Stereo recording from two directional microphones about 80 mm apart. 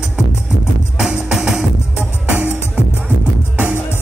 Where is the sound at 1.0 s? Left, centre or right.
Centre.